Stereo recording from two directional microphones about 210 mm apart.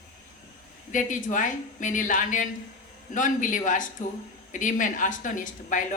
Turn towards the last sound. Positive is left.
turn(degrees=40)  # may be behind; listen again after turning